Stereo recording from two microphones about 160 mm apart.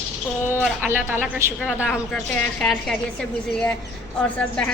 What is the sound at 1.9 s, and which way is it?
A woman's voice, 5° left (ahead or behind).